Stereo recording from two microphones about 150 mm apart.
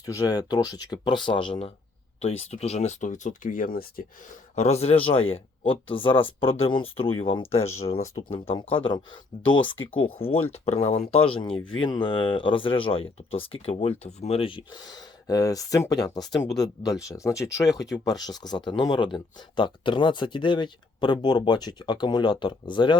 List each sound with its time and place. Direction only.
0.0 s speech: 20° left (ahead or behind); by 4.0 s 75° left (ahead or behind)
4.5 s speech: 45° left (ahead or behind)